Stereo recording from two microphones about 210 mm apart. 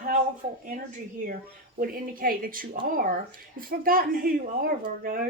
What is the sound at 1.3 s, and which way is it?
Speech, 45° right (ahead or behind).